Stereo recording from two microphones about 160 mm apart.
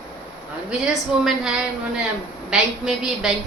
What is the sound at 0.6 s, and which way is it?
A woman's voice, 5° right (ahead or behind).